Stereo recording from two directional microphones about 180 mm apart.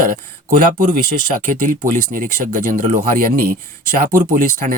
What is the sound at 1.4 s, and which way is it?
A man's voice, 50° right (ahead or behind).